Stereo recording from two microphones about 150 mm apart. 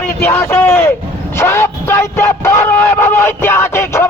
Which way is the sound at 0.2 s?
15° left (ahead or behind).